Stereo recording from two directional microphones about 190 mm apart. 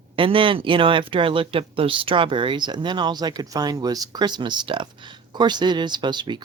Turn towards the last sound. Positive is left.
turn(degrees=-25)  # may be behind; listen again after turning